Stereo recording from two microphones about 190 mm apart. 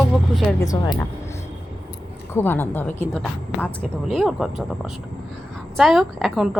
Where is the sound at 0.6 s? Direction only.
20° left (ahead or behind).